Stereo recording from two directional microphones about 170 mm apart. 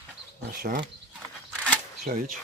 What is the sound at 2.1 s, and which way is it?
Speech, 55° right (ahead or behind).